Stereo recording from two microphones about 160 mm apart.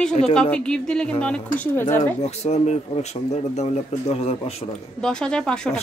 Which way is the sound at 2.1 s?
45° left (ahead or behind).